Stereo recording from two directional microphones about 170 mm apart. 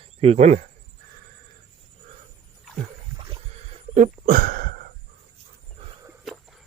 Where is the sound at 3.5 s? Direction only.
40° right (ahead or behind); by 4.9 s 60° right (ahead or behind).